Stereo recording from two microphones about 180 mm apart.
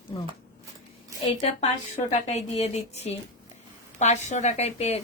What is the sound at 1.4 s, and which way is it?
A woman's voice, 35° left (ahead or behind).